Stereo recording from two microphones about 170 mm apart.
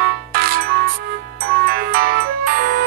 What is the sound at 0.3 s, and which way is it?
Music, 65° right (ahead or behind).